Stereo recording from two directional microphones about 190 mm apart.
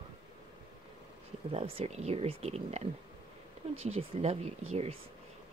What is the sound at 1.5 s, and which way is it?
Speech, 30° right (ahead or behind).